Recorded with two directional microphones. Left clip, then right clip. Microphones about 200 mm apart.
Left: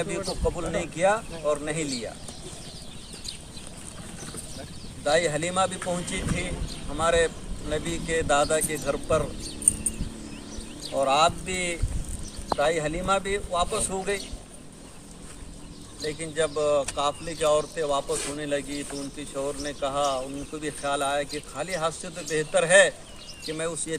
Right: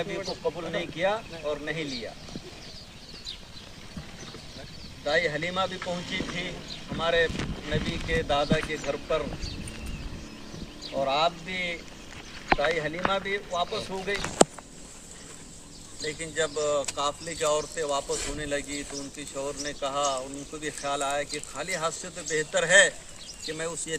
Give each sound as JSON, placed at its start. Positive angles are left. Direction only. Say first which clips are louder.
{"t": 0.4, "sound": "speech", "louder": "left 2 dB", "side_deg": -15}
{"t": 5.0, "sound": "speech", "louder": "left 2 dB", "side_deg": -15}
{"t": 11.0, "sound": "speech", "louder": "left 4 dB", "side_deg": -15}
{"t": 16.0, "sound": "speech", "louder": "left 2 dB", "side_deg": -20}